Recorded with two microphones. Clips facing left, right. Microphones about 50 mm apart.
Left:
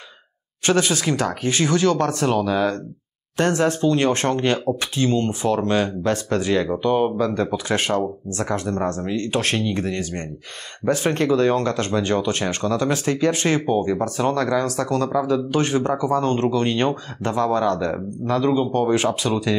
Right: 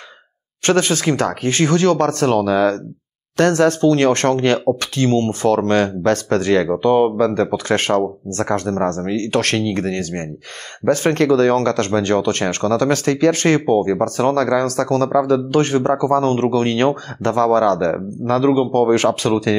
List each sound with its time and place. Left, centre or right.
0.7 s speech: right
18.4 s speech: right
18.7 s speech: right